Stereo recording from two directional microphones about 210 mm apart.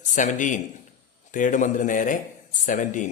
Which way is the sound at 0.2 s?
35° left (ahead or behind).